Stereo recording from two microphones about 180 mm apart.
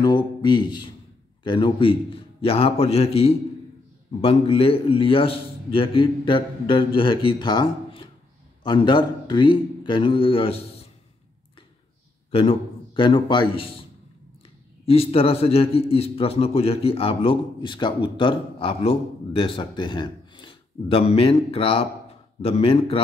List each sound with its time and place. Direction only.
0.0 s a man's voice: 25° left (ahead or behind)
12.3 s a man's voice: 30° left (ahead or behind)
14.9 s a man's voice: 30° left (ahead or behind)